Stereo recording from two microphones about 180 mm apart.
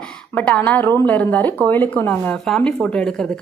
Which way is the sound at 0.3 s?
10° left (ahead or behind).